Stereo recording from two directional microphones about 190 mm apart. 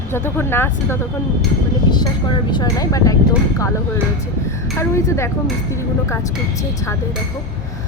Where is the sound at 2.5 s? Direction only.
20° left (ahead or behind).